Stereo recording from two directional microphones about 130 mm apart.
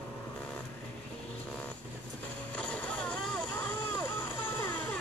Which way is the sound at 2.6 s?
10° left (ahead or behind).